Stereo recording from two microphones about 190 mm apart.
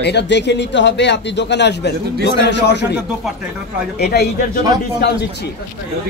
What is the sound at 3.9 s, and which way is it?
Speech, 60° left (ahead or behind).